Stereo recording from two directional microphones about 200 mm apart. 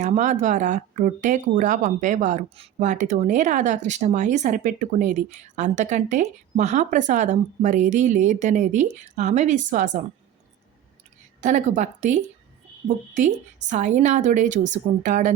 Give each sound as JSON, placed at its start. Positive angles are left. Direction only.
{"t": 0.0, "sound": "speech", "side_deg": -40}
{"t": 11.3, "sound": "speech", "side_deg": -40}